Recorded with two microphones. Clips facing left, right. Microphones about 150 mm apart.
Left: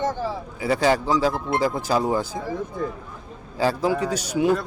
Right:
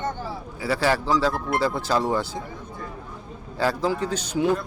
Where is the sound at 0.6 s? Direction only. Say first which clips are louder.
Left 3 dB; 20° left (ahead or behind).